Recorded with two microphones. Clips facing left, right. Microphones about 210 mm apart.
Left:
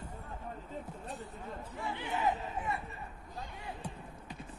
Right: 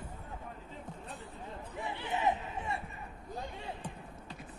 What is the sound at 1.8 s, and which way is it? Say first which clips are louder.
Speech: right 1 dB; 20° right (ahead or behind).